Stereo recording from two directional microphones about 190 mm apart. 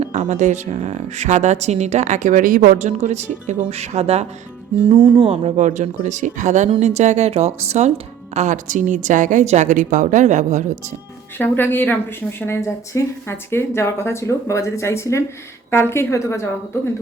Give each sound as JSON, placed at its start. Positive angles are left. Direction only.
{"t": 0.0, "sound": "speech", "side_deg": -35}
{"t": 5.3, "sound": "speech", "side_deg": -35}
{"t": 11.3, "sound": "speech", "side_deg": 10}